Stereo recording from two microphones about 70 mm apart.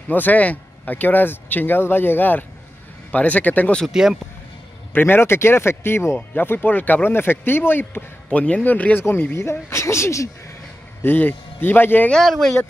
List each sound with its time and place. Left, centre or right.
0.1 s speech: left
3.8 s speech: centre
4.9 s speech: left
8.3 s speech: centre
9.4 s speech: left
11.0 s speech: left
12.1 s speech: centre